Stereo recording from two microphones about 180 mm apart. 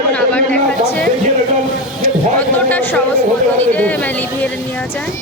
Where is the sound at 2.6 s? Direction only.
10° left (ahead or behind).